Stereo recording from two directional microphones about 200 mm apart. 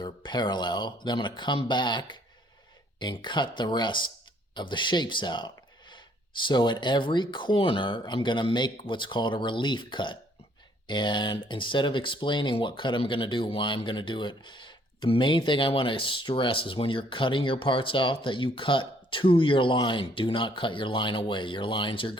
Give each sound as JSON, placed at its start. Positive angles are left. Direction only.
{"t": 0.0, "sound": "speech", "side_deg": 20}